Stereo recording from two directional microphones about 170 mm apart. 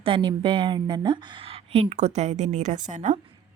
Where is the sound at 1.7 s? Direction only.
40° right (ahead or behind).